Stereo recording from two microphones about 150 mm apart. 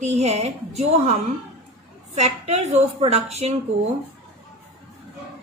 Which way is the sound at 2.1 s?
50° right (ahead or behind).